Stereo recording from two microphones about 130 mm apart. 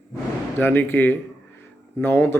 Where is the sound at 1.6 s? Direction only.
15° left (ahead or behind).